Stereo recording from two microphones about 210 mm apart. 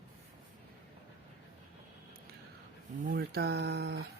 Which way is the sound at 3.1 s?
50° right (ahead or behind).